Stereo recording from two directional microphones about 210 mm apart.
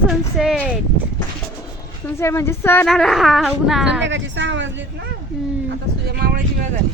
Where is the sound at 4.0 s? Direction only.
60° right (ahead or behind).